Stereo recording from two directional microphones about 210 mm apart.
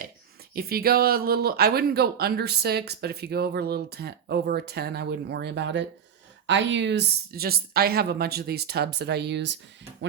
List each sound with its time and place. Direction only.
0.5 s speech: 45° right (ahead or behind)